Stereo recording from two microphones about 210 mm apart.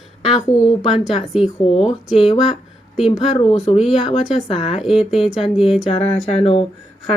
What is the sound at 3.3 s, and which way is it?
Speech, 30° left (ahead or behind).